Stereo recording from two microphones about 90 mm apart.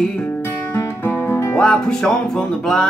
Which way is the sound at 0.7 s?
25° left (ahead or behind).